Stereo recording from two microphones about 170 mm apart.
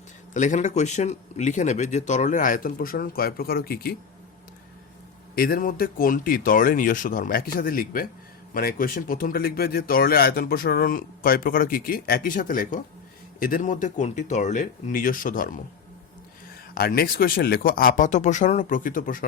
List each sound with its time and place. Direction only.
0.3 s speech: 45° left (ahead or behind); by 3.9 s 65° left (ahead or behind)
5.3 s speech: 60° left (ahead or behind)
16.7 s speech: 65° left (ahead or behind)